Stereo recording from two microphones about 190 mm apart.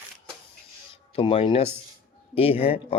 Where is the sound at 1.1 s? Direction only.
30° left (ahead or behind).